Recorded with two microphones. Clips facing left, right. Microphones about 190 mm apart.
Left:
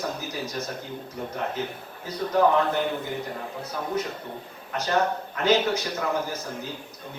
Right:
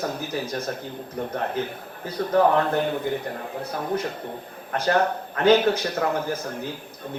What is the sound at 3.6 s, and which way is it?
Speech, 55° right (ahead or behind).